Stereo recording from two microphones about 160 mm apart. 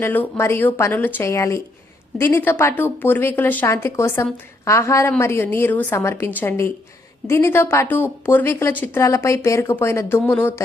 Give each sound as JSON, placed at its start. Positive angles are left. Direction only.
{"t": 0.0, "sound": "speech", "side_deg": 15}